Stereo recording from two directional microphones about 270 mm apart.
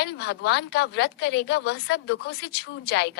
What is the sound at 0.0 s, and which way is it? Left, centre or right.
A woman's voice, left.